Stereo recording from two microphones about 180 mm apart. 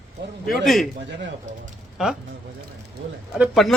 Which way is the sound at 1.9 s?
Centre (ahead or behind).